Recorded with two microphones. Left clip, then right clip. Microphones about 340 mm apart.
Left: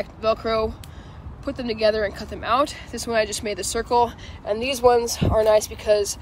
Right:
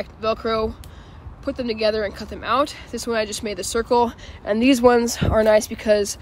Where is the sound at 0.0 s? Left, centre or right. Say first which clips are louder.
Left 1 dB; centre.